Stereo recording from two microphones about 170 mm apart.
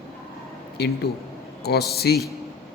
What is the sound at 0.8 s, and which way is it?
Speech, 70° left (ahead or behind).